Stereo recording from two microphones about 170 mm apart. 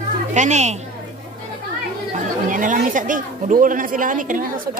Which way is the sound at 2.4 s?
50° right (ahead or behind).